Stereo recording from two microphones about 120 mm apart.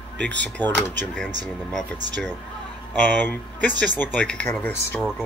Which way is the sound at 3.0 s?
10° left (ahead or behind).